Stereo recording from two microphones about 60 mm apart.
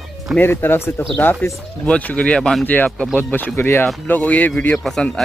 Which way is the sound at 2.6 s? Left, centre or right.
Left.